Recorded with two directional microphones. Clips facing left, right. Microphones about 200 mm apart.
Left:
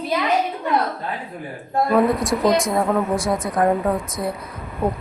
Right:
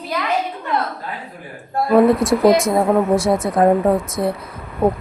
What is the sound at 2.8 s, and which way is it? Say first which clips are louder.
Speech: right 5 dB; 25° right (ahead or behind).